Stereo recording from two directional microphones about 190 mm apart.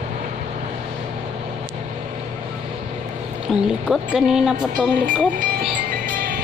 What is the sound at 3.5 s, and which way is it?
Speech, centre (ahead or behind).